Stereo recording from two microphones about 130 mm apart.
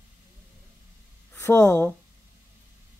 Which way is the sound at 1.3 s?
15° left (ahead or behind).